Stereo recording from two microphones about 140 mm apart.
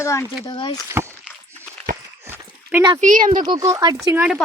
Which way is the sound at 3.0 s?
70° right (ahead or behind).